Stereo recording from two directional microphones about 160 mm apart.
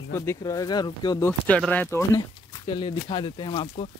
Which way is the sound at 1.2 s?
10° left (ahead or behind).